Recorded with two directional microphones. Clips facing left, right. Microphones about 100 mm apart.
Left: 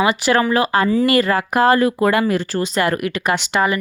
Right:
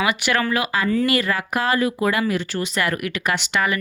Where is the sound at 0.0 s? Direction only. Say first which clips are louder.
Left 5 dB; 30° left (ahead or behind).